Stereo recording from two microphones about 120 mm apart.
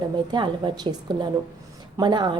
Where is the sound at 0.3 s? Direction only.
40° right (ahead or behind).